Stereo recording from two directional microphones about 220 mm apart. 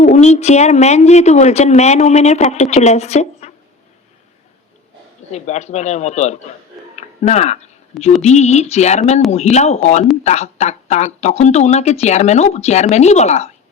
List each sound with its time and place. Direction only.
0.0 s speech: 30° left (ahead or behind)
5.3 s speech: 30° left (ahead or behind)